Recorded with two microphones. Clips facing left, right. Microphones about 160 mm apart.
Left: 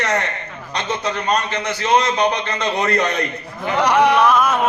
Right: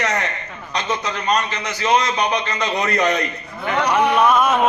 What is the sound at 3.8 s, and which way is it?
Speech, 80° left.